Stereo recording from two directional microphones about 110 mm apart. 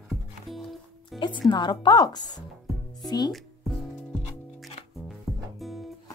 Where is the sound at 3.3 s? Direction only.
Centre (ahead or behind).